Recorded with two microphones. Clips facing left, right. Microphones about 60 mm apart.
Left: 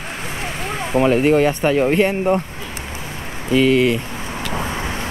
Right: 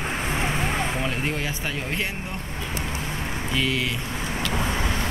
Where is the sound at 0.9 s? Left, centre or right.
Left.